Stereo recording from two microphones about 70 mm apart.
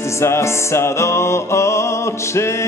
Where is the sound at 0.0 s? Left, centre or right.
Left.